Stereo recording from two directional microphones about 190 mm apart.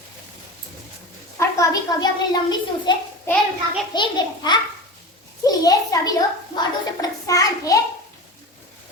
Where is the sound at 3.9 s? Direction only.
25° left (ahead or behind).